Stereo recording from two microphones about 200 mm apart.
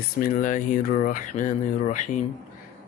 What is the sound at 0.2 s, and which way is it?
Speech, 40° left (ahead or behind).